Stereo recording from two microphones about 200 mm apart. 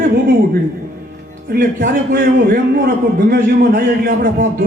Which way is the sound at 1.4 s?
45° right (ahead or behind).